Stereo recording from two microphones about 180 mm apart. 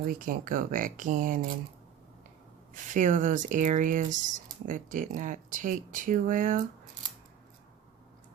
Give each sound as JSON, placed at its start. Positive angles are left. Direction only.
{"t": 0.0, "sound": "speech", "side_deg": -50}
{"t": 2.7, "sound": "speech", "side_deg": -45}